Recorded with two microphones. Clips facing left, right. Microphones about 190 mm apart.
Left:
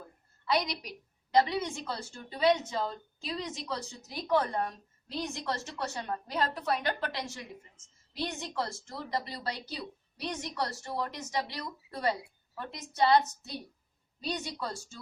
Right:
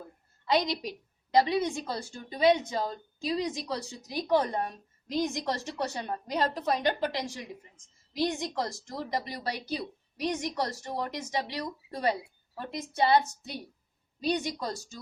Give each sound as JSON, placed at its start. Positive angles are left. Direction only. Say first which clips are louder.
{"t": 0.5, "sound": "a woman's voice", "louder": "right 4 dB", "side_deg": -25}
{"t": 14.3, "sound": "a woman's voice", "louder": "right 6 dB", "side_deg": -15}